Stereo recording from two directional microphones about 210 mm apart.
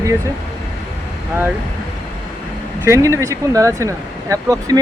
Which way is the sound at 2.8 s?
15° right (ahead or behind).